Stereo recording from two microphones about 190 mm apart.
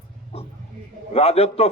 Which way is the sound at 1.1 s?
30° left (ahead or behind).